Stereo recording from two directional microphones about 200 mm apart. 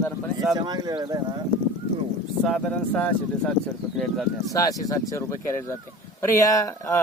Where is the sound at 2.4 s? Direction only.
5° left (ahead or behind).